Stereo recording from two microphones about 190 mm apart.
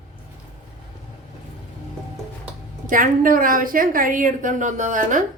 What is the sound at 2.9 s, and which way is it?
A woman's voice, 45° right (ahead or behind).